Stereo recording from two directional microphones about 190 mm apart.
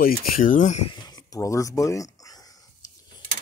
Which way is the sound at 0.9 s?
20° left (ahead or behind).